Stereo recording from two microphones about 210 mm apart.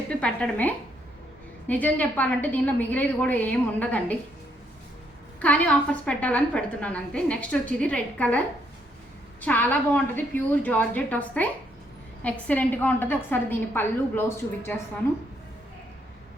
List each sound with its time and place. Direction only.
0.1 s a woman's voice: 5° left (ahead or behind)
5.4 s a woman's voice: 5° left (ahead or behind)
9.4 s a woman's voice: 5° left (ahead or behind)